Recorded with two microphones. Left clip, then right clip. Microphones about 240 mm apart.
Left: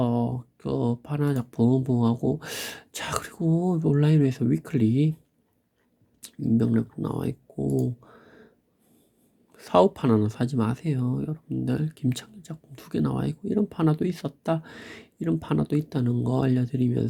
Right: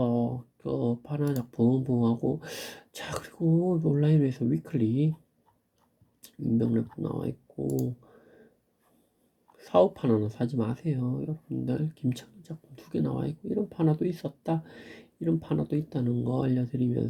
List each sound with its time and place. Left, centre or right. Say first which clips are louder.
0.0 s speech: left 2 dB; left
6.2 s speech: left 3 dB; left
9.5 s speech: left 3 dB; left